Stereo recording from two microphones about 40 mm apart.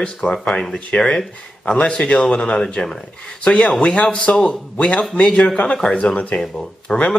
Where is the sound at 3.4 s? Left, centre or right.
Left.